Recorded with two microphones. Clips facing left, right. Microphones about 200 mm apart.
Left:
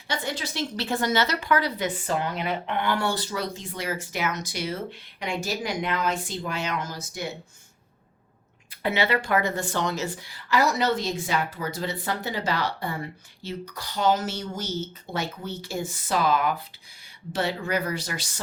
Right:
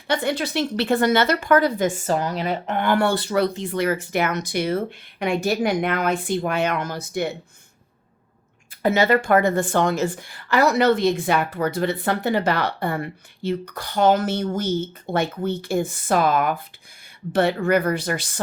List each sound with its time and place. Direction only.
0.1 s speech: 60° right (ahead or behind)
8.7 s speech: 45° right (ahead or behind)